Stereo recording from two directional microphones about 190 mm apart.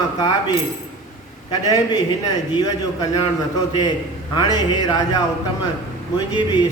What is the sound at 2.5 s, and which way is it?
Speech, 20° left (ahead or behind).